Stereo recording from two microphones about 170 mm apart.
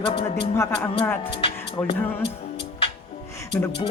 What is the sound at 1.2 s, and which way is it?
Speech, 30° left (ahead or behind).